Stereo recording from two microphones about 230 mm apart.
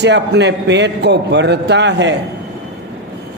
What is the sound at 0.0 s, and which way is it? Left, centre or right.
A man's voice, right.